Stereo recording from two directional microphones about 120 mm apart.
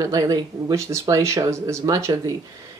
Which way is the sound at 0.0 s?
30° right (ahead or behind).